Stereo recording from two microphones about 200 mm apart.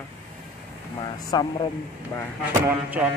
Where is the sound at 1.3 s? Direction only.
20° left (ahead or behind).